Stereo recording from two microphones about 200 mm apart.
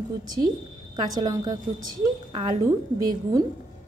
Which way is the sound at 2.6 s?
15° right (ahead or behind).